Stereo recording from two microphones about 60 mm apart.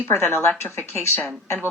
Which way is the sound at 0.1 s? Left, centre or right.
Left.